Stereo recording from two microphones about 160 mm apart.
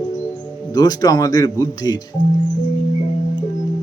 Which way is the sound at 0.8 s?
25° left (ahead or behind).